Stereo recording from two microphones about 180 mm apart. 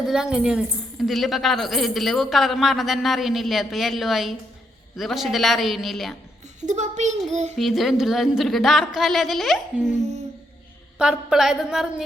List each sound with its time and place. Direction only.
0.1 s a woman's voice: 5° right (ahead or behind)
6.7 s speech: 40° right (ahead or behind)
7.6 s a woman's voice: centre (ahead or behind)
10.9 s a woman's voice: 5° right (ahead or behind)